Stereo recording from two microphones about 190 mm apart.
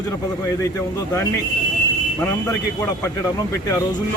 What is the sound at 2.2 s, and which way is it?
Speech, 15° left (ahead or behind).